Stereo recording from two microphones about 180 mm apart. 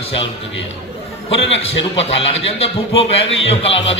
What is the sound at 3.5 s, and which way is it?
Speech, 35° left (ahead or behind).